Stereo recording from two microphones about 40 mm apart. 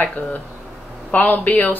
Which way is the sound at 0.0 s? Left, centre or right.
Left.